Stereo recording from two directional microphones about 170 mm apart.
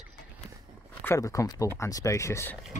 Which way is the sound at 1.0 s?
15° left (ahead or behind).